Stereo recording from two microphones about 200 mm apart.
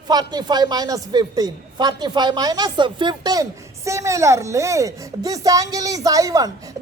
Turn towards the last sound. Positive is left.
turn(degrees=-20)  # may be behind; listen again after turning